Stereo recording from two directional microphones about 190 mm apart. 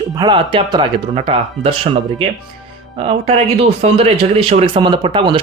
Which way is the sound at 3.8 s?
30° right (ahead or behind).